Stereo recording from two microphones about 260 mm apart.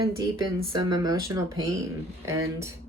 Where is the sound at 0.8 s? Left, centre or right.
Centre.